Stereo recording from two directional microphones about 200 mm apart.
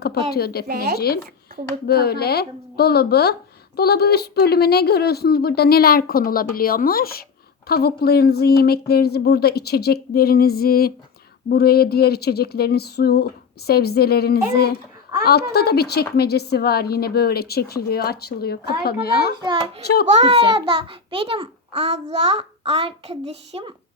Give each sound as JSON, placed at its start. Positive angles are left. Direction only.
{"t": 0.3, "sound": "speech", "side_deg": 50}
{"t": 19.4, "sound": "a child's voice", "side_deg": -25}